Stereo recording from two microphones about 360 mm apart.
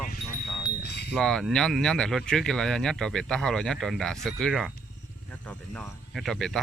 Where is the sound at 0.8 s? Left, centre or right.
Left.